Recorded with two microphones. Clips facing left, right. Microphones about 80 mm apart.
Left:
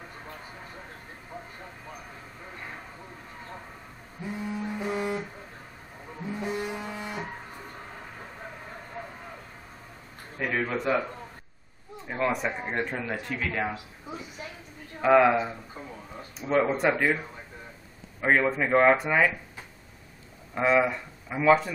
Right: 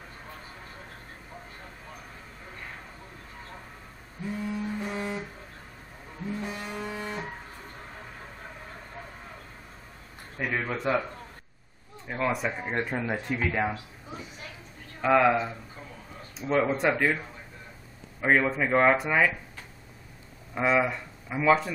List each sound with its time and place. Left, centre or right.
4.2 s a sound: centre
6.3 s vehicle: centre
10.3 s a man's voice: centre
12.1 s speech: centre
12.8 s speech: centre
15.0 s a man's voice: centre
18.2 s speech: centre